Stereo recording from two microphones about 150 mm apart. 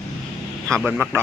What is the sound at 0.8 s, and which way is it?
Speech, 10° right (ahead or behind).